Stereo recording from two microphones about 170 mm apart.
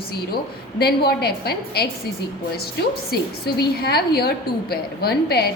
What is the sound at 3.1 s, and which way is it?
A woman's voice, 65° left (ahead or behind).